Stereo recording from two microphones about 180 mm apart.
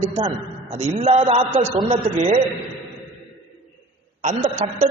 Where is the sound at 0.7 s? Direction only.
35° right (ahead or behind).